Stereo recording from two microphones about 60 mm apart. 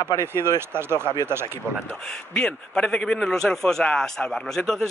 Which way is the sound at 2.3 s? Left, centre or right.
Centre.